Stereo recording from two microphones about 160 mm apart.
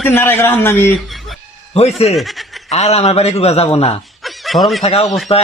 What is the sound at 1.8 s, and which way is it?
Speech, 40° left (ahead or behind).